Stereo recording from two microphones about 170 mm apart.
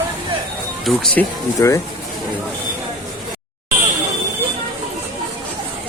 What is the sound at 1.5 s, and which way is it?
Speech, 20° left (ahead or behind).